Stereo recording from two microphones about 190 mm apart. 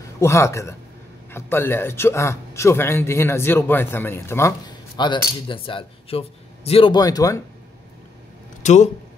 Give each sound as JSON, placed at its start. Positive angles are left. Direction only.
{"t": 0.2, "sound": "a man's voice", "side_deg": 15}
{"t": 8.6, "sound": "speech", "side_deg": 40}